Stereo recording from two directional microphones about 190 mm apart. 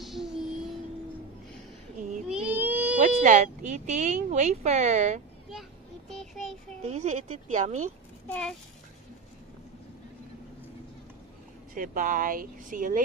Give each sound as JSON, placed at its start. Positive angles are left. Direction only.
{"t": 0.0, "sound": "child singing", "side_deg": 0}
{"t": 2.2, "sound": "a sound", "side_deg": -5}
{"t": 3.3, "sound": "speech", "side_deg": -40}
{"t": 5.5, "sound": "child singing", "side_deg": 0}
{"t": 6.8, "sound": "speech", "side_deg": -35}
{"t": 8.3, "sound": "a child's voice", "side_deg": 5}
{"t": 11.7, "sound": "speech", "side_deg": -45}